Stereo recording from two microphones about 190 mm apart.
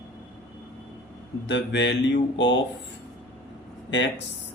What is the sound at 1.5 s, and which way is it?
Speech, 65° left (ahead or behind).